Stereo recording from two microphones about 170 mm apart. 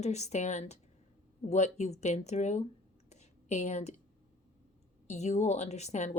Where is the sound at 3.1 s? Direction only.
40° left (ahead or behind).